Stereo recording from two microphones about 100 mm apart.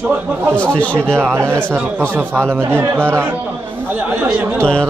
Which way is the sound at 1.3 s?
25° right (ahead or behind).